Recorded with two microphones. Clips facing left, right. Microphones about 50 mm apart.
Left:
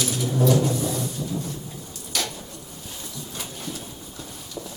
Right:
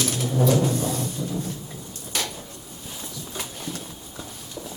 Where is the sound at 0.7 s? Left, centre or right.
Right.